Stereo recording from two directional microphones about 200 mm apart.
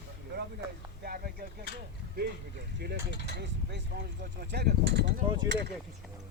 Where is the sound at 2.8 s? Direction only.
55° right (ahead or behind).